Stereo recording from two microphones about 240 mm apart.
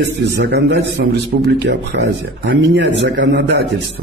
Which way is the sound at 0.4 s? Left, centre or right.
Right.